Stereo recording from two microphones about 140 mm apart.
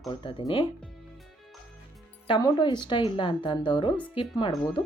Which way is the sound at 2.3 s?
30° left (ahead or behind).